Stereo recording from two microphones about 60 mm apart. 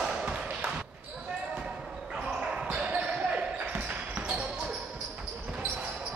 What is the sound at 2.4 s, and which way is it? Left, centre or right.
Basketball bounce, centre.